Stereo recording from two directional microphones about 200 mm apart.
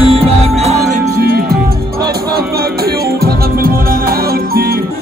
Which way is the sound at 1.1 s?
50° right (ahead or behind).